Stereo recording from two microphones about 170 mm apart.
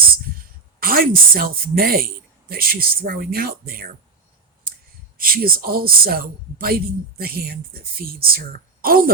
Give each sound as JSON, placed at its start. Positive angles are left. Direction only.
{"t": 0.8, "sound": "speech", "side_deg": -60}
{"t": 5.1, "sound": "speech", "side_deg": -60}